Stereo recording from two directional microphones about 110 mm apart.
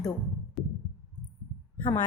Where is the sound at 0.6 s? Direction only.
Centre (ahead or behind).